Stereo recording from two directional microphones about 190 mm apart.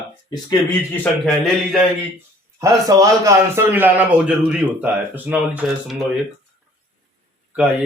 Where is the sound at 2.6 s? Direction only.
15° right (ahead or behind).